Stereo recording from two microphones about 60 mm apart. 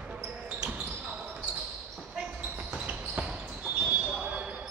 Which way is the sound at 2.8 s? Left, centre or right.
Right.